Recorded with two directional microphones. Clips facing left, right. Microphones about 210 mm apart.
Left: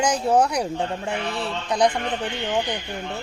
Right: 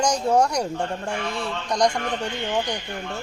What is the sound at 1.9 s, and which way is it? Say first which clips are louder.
Speech: even; 20° left (ahead or behind).